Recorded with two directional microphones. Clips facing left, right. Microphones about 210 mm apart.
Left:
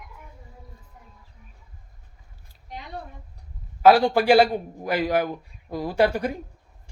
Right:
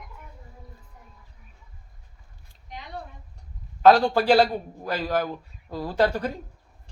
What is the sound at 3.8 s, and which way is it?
A man's voice, 10° left (ahead or behind).